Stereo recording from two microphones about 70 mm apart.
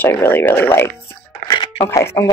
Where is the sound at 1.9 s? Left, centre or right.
Left.